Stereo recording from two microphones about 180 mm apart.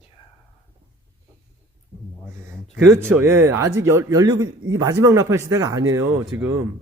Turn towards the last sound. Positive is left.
turn(degrees=-15)  # may be behind; listen again after turning